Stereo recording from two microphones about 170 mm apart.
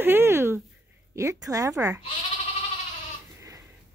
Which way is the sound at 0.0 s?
15° right (ahead or behind).